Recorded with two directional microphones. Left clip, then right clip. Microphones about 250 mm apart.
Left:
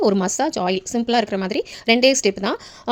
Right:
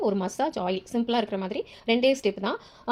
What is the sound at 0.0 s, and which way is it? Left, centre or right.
A woman's voice, left.